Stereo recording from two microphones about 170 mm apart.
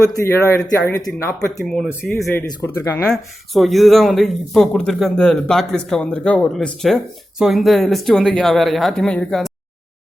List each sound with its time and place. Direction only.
0.1 s speech: 20° left (ahead or behind)
1.6 s speech: 5° left (ahead or behind)
2.2 s speech: 15° left (ahead or behind)
3.1 s speech: centre (ahead or behind)